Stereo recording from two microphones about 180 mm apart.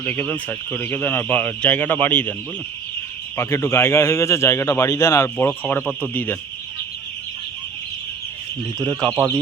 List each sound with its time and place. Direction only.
0.0 s speech: 10° left (ahead or behind)
3.3 s speech: 15° left (ahead or behind)
9.1 s speech: 15° right (ahead or behind)